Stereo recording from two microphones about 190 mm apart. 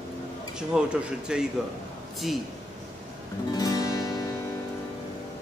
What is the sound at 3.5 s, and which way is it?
Guitar, 20° left (ahead or behind).